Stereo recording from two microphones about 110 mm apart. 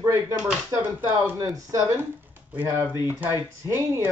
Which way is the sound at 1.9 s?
20° right (ahead or behind).